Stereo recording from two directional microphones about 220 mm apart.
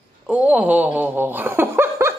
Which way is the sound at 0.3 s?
5° right (ahead or behind).